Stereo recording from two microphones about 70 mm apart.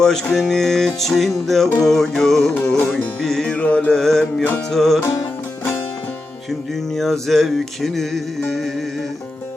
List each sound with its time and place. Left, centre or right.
0.0 s music: centre
2.6 s music: left
3.2 s music: centre
3.5 s mantra: centre
3.8 s music: centre
6.7 s music: centre